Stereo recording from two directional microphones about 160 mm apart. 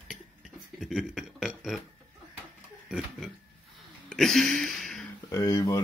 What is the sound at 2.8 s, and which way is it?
Speech, 5° right (ahead or behind).